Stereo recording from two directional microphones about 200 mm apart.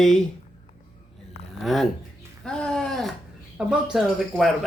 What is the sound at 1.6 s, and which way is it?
Speech, centre (ahead or behind).